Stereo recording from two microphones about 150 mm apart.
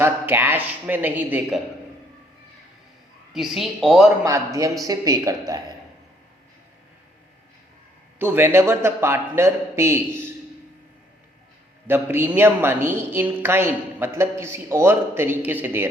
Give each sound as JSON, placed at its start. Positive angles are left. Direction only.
{"t": 0.0, "sound": "a woman's voice", "side_deg": -15}
{"t": 3.3, "sound": "speech", "side_deg": 0}
{"t": 4.2, "sound": "a woman's voice", "side_deg": -20}
{"t": 8.2, "sound": "a woman's voice", "side_deg": -15}
{"t": 11.9, "sound": "a woman's voice", "side_deg": -15}